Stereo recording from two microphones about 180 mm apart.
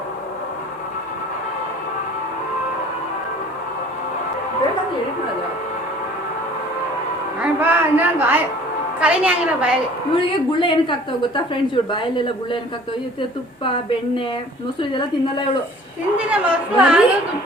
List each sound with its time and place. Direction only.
7.3 s a sound: 10° right (ahead or behind)
9.0 s a woman's voice: 5° right (ahead or behind)
10.2 s speech: 30° left (ahead or behind)
14.8 s speech: 25° left (ahead or behind)
16.1 s a woman's voice: 5° right (ahead or behind)